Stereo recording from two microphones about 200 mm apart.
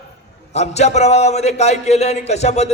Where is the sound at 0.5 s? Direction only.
35° left (ahead or behind).